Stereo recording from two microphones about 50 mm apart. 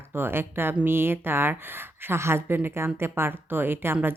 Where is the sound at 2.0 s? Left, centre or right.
Right.